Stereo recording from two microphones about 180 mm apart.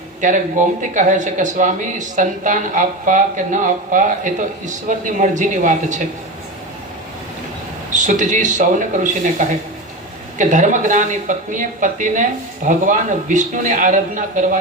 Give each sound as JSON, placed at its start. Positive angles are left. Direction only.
{"t": 0.2, "sound": "speech", "side_deg": -45}
{"t": 7.9, "sound": "speech", "side_deg": -45}